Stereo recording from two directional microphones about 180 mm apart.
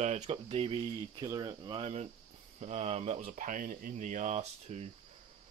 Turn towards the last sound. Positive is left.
turn(degrees=-40)  # may be behind; listen again after turning